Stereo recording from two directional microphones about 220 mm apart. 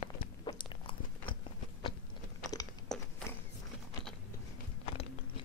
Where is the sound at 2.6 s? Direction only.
15° left (ahead or behind).